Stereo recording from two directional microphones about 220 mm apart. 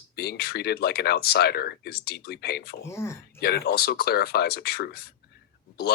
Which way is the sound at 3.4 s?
45° left (ahead or behind).